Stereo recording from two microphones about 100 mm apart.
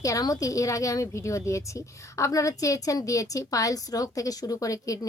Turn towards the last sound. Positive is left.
turn(degrees=35)  # may be behind; listen again after turning